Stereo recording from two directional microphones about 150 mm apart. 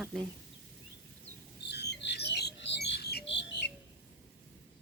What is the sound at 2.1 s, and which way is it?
Bird, 90° left.